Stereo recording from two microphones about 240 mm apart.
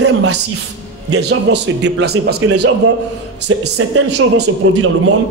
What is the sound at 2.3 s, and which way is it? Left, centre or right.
A man's voice, right.